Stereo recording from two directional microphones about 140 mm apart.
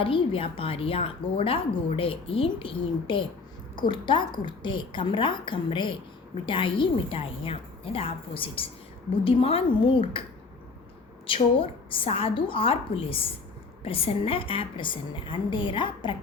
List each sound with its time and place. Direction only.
0.0 s a woman's voice: 40° left (ahead or behind)
11.3 s a woman's voice: 40° left (ahead or behind)